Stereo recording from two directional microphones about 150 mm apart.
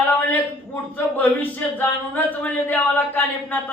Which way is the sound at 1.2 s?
10° left (ahead or behind).